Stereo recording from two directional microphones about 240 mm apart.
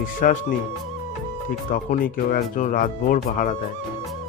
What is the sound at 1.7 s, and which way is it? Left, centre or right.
Speech, left.